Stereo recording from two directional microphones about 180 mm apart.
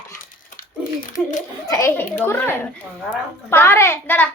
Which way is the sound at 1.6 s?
15° left (ahead or behind).